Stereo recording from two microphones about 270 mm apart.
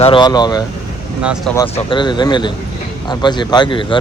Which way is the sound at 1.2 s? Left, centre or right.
Centre.